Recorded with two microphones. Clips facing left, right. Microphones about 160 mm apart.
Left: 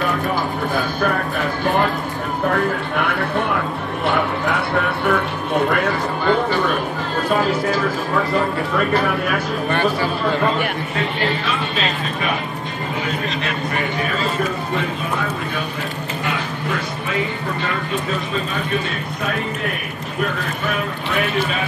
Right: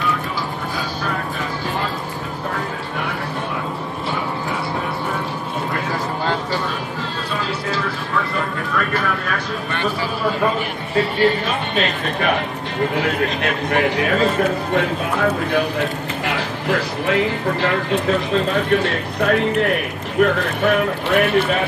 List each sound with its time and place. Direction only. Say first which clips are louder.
2.5 s a sound: left 6 dB; 60° left (ahead or behind)
4.1 s music: left 5 dB; 65° left (ahead or behind)
5.7 s a sound: left 5 dB; 70° left (ahead or behind)
6.5 s a sound: left 4 dB; 60° left (ahead or behind)
7.2 s music: left 8 dB; 45° left (ahead or behind)
8.7 s speech: left 3 dB; 15° left (ahead or behind)
11.0 s music: right 7 dB; 45° right (ahead or behind)
12.9 s a man's voice: right 4 dB; 80° right
14.8 s speech: right 4 dB; 75° right (ahead or behind)
16.3 s speech: right 3 dB; 85° right; by 21.5 s 60° right (ahead or behind)